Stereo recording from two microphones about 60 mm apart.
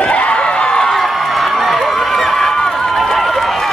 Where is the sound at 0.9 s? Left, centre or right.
Centre.